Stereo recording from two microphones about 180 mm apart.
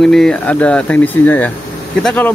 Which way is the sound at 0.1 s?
5° left (ahead or behind).